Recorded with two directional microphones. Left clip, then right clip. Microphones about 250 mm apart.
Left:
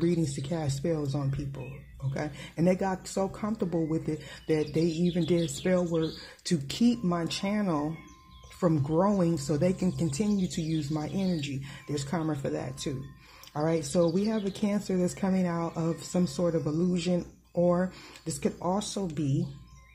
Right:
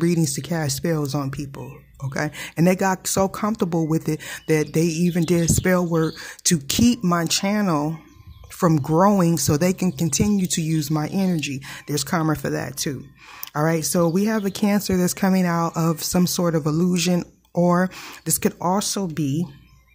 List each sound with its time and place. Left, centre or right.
0.0 s speech: right